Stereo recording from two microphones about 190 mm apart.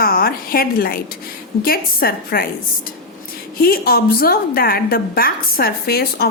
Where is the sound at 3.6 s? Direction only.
50° left (ahead or behind).